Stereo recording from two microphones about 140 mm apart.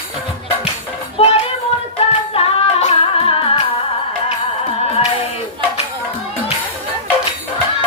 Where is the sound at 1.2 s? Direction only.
45° left (ahead or behind).